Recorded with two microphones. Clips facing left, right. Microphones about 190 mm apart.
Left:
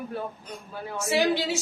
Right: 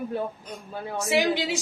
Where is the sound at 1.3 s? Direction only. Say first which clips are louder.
Even; 15° right (ahead or behind).